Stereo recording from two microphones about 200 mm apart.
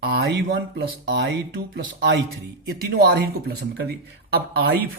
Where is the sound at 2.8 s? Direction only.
50° right (ahead or behind).